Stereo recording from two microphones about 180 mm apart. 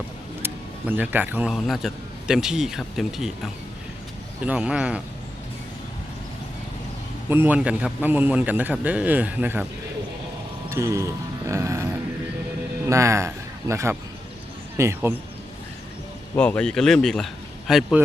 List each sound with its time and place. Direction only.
0.4 s a man's voice: 10° right (ahead or behind)
7.3 s a man's voice: 10° right (ahead or behind)
10.7 s a man's voice: 15° right (ahead or behind)
16.3 s a man's voice: 5° left (ahead or behind)